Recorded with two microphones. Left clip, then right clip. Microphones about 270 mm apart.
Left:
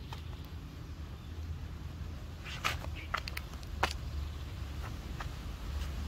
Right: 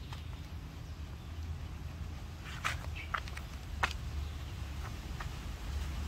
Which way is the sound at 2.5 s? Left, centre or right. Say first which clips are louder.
Left 2 dB; left.